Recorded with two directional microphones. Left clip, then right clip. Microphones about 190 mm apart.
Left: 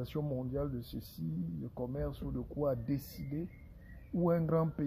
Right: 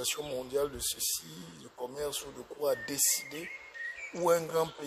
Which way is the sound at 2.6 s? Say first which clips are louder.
Right 5 dB; 15° right (ahead or behind).